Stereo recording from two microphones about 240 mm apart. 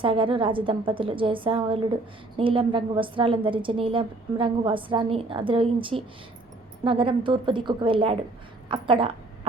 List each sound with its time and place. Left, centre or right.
0.0 s a woman's voice: right